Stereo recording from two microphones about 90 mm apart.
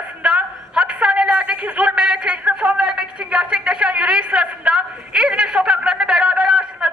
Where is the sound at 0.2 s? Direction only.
10° right (ahead or behind).